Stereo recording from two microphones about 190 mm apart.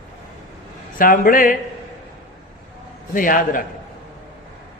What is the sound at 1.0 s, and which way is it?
Speech, 45° left (ahead or behind).